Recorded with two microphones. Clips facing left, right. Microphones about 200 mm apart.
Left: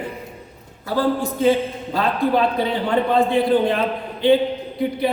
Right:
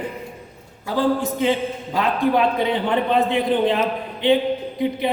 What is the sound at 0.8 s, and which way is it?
Speech, 15° right (ahead or behind).